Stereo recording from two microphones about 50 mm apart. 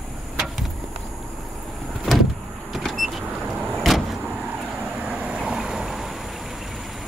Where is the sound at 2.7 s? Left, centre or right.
Centre.